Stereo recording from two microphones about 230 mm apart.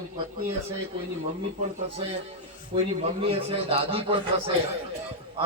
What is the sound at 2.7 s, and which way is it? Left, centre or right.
A man's voice, right.